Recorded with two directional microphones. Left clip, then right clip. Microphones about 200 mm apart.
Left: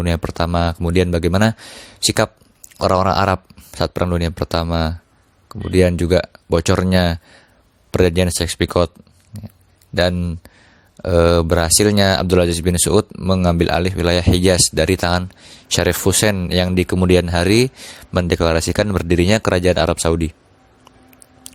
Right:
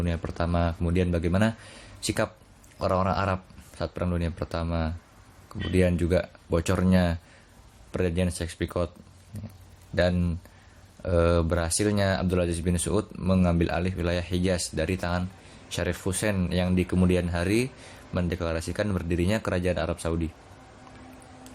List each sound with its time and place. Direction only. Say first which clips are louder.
0.0 s speech: left 10 dB; 50° left (ahead or behind)